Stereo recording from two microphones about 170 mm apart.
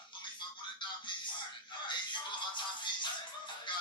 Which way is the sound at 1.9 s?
25° left (ahead or behind).